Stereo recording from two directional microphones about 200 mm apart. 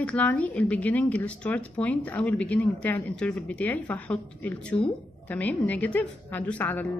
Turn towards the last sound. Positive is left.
turn(degrees=10)  # may be behind; listen again after turning